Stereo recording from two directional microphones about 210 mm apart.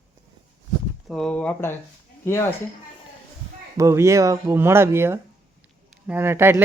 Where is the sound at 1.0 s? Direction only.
Centre (ahead or behind).